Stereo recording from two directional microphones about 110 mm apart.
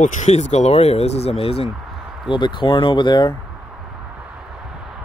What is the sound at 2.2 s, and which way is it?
Speech, 45° left (ahead or behind).